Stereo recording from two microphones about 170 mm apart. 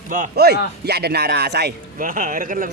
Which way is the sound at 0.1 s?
60° right (ahead or behind).